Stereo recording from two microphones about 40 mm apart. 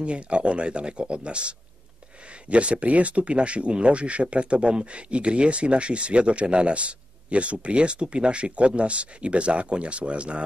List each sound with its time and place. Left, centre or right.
0.0 s speech: right
2.5 s speech: right